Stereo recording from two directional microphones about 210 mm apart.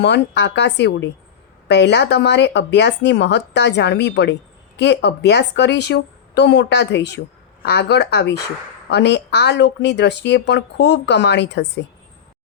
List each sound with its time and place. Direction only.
0.0 s a woman's voice: 55° left (ahead or behind)